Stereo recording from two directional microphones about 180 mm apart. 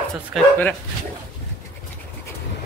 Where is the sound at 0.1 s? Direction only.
5° left (ahead or behind).